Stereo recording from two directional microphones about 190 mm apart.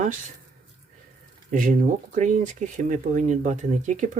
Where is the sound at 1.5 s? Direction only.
45° right (ahead or behind).